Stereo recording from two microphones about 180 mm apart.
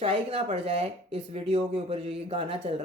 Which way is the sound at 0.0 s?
35° right (ahead or behind).